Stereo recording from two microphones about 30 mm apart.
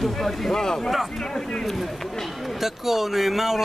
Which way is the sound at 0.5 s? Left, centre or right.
Left.